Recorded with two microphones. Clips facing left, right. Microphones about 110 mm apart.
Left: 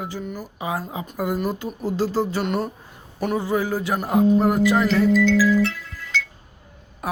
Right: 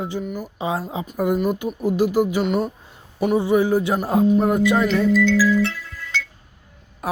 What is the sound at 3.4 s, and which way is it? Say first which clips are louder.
Speech: right 7 dB; 20° right (ahead or behind).